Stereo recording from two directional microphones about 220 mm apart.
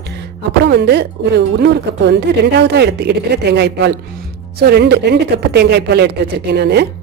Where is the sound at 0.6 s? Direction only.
50° right (ahead or behind).